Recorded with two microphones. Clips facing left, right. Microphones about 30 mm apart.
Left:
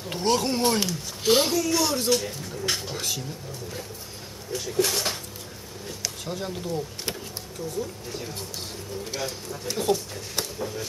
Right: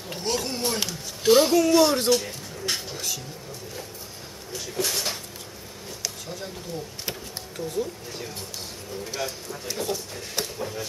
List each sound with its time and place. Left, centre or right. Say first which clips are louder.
0.1 s speech: left 5 dB; centre
0.7 s speech: left 3 dB; centre
1.5 s speech: right 6 dB; right
2.0 s speech: right 2 dB; centre
2.9 s a sound: left 1 dB; centre
4.5 s speech: left 4 dB; centre
6.2 s speech: left 4 dB; centre
7.5 s speech: right 3 dB; right
8.1 s speech: left 1 dB; centre
10.1 s speech: right 1 dB; centre